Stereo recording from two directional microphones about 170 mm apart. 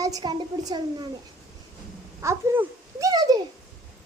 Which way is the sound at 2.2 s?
15° right (ahead or behind).